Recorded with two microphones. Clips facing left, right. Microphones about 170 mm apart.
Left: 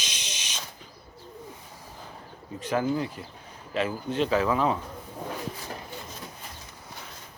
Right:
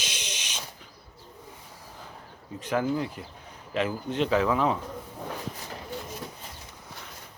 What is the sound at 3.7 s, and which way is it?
Speech, 15° right (ahead or behind).